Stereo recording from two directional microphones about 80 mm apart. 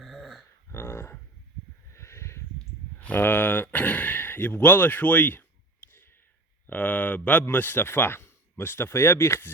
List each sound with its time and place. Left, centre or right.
0.0 s dog: centre
0.7 s a sound: left
3.0 s speech: left
5.9 s clicking: left
6.7 s a man's voice: centre; by 9.5 s left